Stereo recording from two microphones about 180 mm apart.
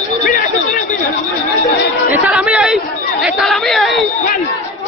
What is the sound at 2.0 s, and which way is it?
Speech, 10° right (ahead or behind).